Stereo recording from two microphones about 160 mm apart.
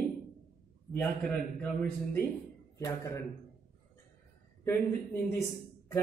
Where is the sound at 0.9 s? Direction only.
10° left (ahead or behind).